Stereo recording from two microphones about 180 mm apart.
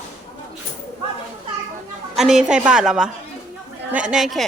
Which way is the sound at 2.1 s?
Centre (ahead or behind).